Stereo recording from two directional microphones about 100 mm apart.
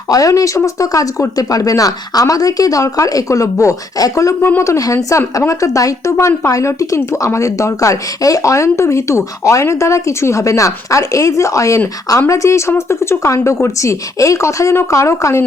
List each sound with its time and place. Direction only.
0.1 s speech: 35° left (ahead or behind)